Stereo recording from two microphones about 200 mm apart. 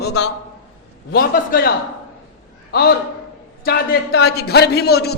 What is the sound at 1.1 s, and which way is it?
Speech, 45° left (ahead or behind).